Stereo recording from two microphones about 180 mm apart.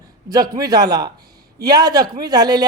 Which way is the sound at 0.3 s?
20° right (ahead or behind).